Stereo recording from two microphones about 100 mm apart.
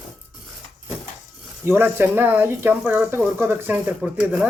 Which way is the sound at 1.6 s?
20° right (ahead or behind).